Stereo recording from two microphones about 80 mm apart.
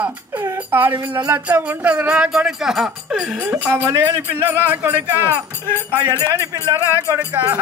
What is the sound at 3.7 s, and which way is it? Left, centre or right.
A man's voice, right.